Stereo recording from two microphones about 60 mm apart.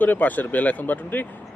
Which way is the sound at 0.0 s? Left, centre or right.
Left.